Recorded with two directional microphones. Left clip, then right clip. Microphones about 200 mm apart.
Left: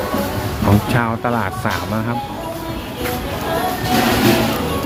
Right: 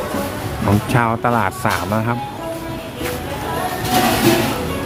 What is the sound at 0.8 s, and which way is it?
Speech, 20° right (ahead or behind).